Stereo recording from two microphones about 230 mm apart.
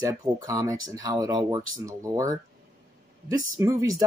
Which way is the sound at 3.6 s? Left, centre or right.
Centre.